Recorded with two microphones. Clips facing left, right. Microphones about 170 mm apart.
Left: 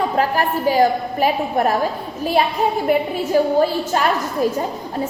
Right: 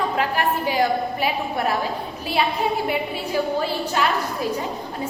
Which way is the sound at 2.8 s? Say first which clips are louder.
Left 7 dB; 45° left (ahead or behind).